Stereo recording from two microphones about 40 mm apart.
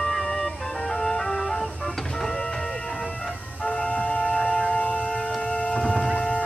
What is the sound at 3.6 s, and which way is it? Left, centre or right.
Music, left.